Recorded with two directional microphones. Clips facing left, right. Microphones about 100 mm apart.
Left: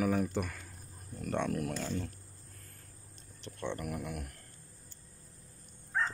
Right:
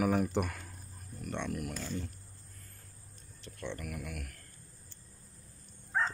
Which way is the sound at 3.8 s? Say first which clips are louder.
Left 3 dB; 35° left (ahead or behind).